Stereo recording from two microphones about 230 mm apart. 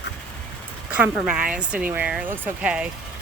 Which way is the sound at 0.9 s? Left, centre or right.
Centre.